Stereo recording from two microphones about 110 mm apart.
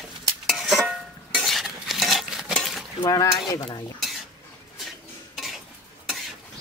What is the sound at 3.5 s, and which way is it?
Cutlery, 40° left (ahead or behind).